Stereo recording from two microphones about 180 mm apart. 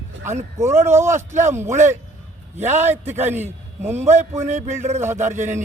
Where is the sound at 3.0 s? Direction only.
40° right (ahead or behind).